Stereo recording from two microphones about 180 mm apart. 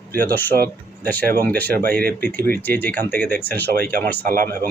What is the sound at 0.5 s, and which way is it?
Speech, 50° right (ahead or behind).